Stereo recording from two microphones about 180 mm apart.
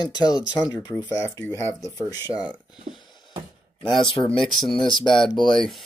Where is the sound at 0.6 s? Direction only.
20° left (ahead or behind).